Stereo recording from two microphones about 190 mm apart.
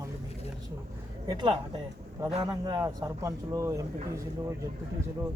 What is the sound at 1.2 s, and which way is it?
Speech, 25° right (ahead or behind).